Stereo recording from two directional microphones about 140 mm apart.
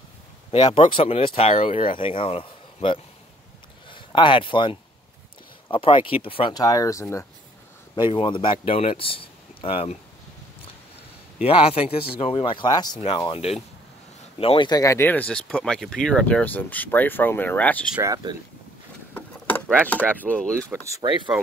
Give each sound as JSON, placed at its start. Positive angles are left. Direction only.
{"t": 0.5, "sound": "speech", "side_deg": 35}
{"t": 6.5, "sound": "speech", "side_deg": 25}
{"t": 7.9, "sound": "speech", "side_deg": 35}
{"t": 11.4, "sound": "speech", "side_deg": 45}
{"t": 13.3, "sound": "speech", "side_deg": 45}
{"t": 18.0, "sound": "speech", "side_deg": -25}
{"t": 19.1, "sound": "speech", "side_deg": 10}
{"t": 20.7, "sound": "speech", "side_deg": -20}